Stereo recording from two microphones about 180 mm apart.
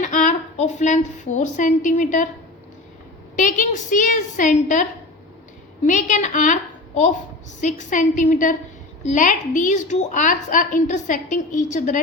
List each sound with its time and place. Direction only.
0.0 s a woman's voice: 45° left (ahead or behind)
3.3 s a woman's voice: 45° left (ahead or behind)